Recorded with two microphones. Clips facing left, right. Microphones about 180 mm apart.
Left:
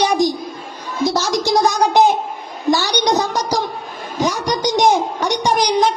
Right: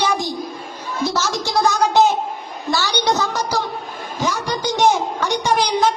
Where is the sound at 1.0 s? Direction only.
15° left (ahead or behind).